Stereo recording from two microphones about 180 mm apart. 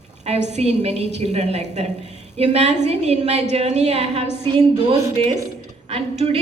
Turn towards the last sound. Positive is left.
turn(degrees=-35)  # may be behind; listen again after turning